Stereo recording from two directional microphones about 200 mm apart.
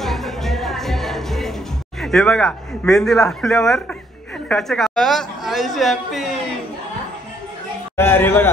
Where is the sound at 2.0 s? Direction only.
5° left (ahead or behind).